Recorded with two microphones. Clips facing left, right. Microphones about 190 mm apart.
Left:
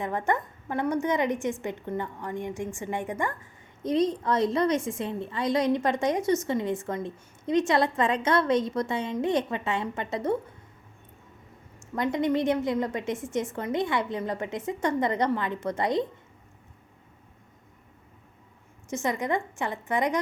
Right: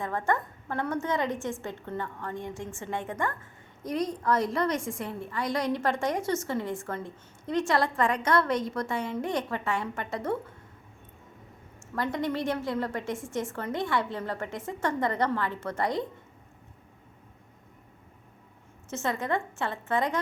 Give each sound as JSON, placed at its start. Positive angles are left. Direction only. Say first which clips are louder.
{"t": 0.0, "sound": "a woman's voice", "louder": "left 1 dB", "side_deg": 20}
{"t": 11.9, "sound": "a woman's voice", "louder": "left 4 dB", "side_deg": 20}
{"t": 18.9, "sound": "a woman's voice", "louder": "left 2 dB", "side_deg": 15}